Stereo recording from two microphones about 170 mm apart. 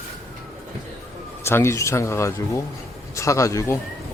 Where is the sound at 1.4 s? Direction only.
15° left (ahead or behind).